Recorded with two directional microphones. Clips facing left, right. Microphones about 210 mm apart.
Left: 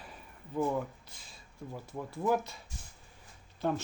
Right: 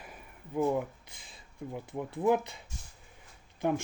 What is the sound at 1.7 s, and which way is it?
Speech, 15° right (ahead or behind).